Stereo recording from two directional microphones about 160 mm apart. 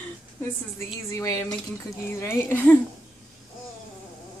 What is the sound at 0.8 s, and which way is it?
A woman's voice, 20° left (ahead or behind).